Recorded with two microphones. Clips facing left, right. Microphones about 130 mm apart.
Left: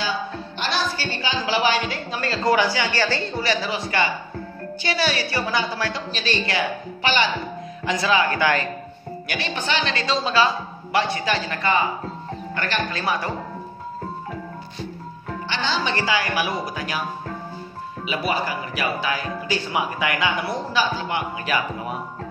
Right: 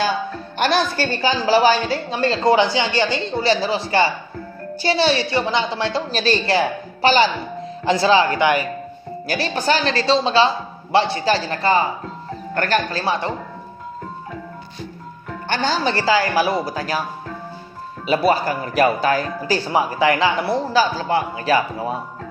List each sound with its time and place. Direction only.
0.6 s a woman's voice: 50° right (ahead or behind); by 6.0 s 25° right (ahead or behind)
6.1 s a woman's voice: 35° right (ahead or behind); by 8.6 s 20° right (ahead or behind)
9.3 s speech: 35° right (ahead or behind)
13.0 s a woman's voice: 25° right (ahead or behind)
15.4 s speech: 45° right (ahead or behind)
18.0 s speech: 40° right (ahead or behind)